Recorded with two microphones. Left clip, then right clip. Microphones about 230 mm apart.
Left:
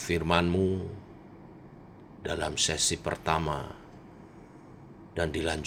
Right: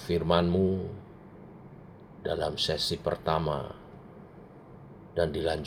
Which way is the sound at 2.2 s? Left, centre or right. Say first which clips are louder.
Even; left.